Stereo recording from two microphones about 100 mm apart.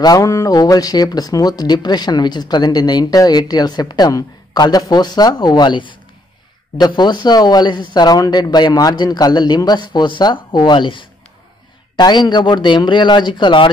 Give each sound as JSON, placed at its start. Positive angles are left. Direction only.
{"t": 0.0, "sound": "speech", "side_deg": 35}